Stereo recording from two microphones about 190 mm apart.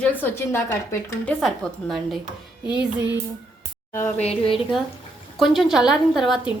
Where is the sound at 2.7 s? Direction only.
5° right (ahead or behind).